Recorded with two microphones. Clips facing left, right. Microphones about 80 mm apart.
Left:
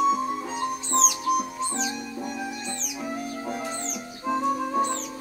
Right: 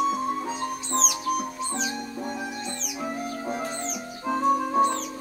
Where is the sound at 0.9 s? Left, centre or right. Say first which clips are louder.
Left 3 dB; right.